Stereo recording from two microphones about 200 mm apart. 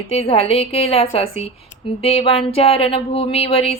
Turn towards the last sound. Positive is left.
turn(degrees=30)  # may be behind; listen again after turning